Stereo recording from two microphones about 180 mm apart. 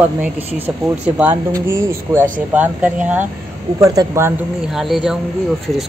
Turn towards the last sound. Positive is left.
turn(degrees=0)  # may be behind; listen again after turning